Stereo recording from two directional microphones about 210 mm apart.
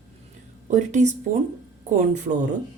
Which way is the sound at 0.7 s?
35° right (ahead or behind).